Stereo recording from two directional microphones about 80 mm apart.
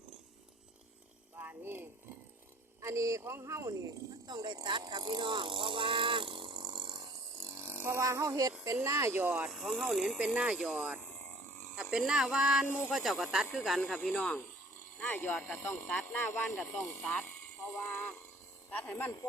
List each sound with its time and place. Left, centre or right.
1.4 s a sound: right
2.8 s speech: right
4.3 s speech: right
7.3 s a sound: right
8.6 s speech: right
9.1 s speech: centre
9.5 s speech: centre
10.2 s speech: centre
13.9 s speech: centre
14.9 s speech: left
17.8 s a sound: left
18.7 s speech: left